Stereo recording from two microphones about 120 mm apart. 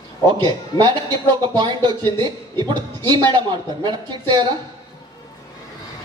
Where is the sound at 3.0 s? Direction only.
40° right (ahead or behind).